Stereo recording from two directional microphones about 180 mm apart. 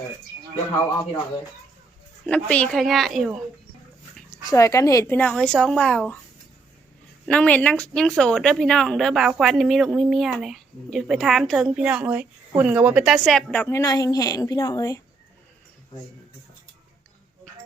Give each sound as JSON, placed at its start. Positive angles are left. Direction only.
{"t": 2.2, "sound": "speech", "side_deg": 5}
{"t": 4.3, "sound": "speech", "side_deg": 15}
{"t": 7.3, "sound": "speech", "side_deg": 5}